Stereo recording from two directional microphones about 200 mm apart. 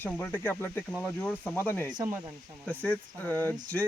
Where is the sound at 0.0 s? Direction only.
10° left (ahead or behind).